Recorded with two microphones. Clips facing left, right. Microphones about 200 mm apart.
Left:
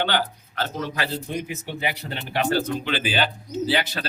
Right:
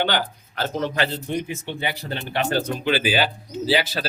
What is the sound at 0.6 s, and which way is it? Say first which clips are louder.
Speech: right 4 dB; 25° right (ahead or behind).